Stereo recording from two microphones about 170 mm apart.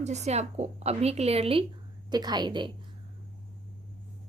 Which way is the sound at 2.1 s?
25° right (ahead or behind).